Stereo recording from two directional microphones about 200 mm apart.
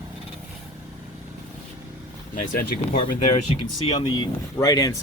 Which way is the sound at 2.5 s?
45° left (ahead or behind).